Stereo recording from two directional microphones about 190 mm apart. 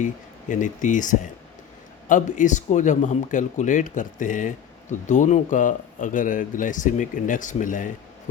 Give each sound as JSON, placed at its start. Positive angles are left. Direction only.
{"t": 0.0, "sound": "speech", "side_deg": 40}